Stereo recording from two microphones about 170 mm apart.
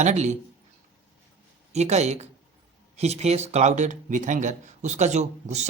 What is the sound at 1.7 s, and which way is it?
Speech, 40° right (ahead or behind).